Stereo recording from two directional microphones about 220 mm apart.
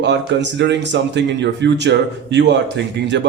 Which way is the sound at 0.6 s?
50° right (ahead or behind).